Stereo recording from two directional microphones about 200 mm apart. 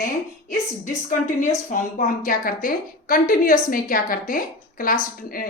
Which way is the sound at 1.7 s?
45° left (ahead or behind).